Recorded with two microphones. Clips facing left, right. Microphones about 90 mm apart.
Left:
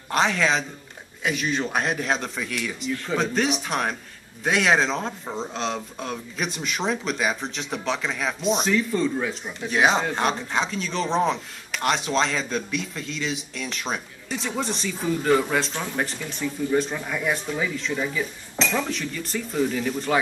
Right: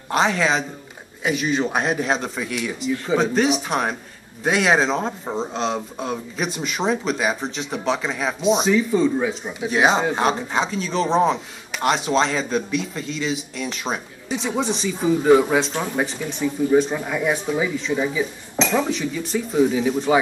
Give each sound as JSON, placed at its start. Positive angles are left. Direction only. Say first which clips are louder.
{"t": 0.1, "sound": "speech", "louder": "right 2 dB", "side_deg": -5}
{"t": 16.1, "sound": "speech", "louder": "right 5 dB", "side_deg": 0}